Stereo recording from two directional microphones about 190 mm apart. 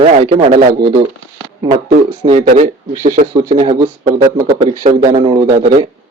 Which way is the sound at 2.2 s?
35° right (ahead or behind).